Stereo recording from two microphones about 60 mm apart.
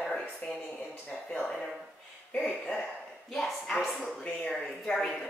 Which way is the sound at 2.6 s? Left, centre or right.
Centre.